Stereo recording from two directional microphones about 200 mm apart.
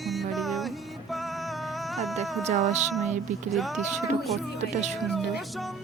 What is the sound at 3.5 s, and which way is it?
Music, centre (ahead or behind).